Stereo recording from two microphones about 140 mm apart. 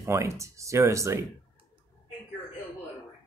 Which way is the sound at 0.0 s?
20° right (ahead or behind).